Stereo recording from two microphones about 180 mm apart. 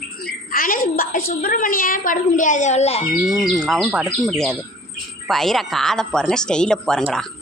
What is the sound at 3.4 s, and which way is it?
Speech, centre (ahead or behind).